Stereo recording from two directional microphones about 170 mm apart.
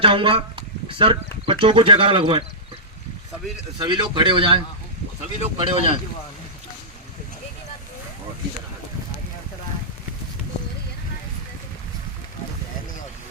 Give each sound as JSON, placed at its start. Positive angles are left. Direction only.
{"t": 0.0, "sound": "speech", "side_deg": -30}
{"t": 3.8, "sound": "speech", "side_deg": -25}